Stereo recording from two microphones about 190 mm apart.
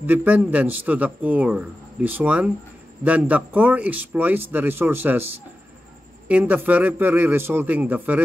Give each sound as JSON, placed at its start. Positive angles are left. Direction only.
{"t": 0.0, "sound": "a man's voice", "side_deg": -10}